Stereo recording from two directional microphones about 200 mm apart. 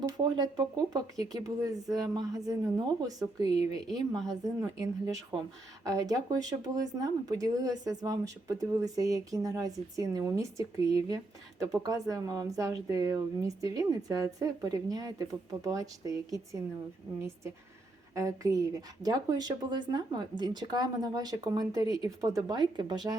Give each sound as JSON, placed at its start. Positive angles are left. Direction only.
{"t": 0.0, "sound": "a woman's voice", "side_deg": -20}